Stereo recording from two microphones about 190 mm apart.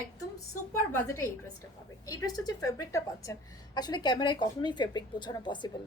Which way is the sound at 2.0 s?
20° left (ahead or behind).